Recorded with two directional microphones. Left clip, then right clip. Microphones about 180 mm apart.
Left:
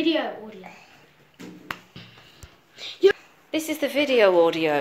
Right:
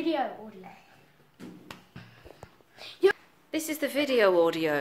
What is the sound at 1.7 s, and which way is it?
Music, 35° left (ahead or behind).